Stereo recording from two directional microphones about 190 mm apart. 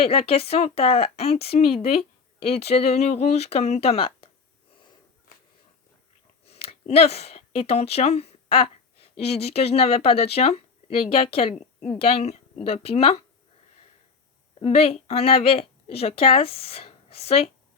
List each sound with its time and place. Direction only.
0.0 s speech: 30° left (ahead or behind)
6.4 s speech: 30° left (ahead or behind)
14.6 s a woman's voice: 30° left (ahead or behind)